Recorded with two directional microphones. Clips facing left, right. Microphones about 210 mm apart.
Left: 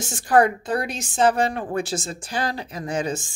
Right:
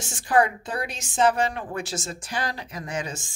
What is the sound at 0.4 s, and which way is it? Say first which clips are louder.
A woman's voice: left 3 dB; 40° left (ahead or behind).